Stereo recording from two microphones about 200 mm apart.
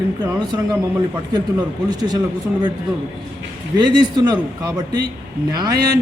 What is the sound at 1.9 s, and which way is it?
Speech, 20° right (ahead or behind).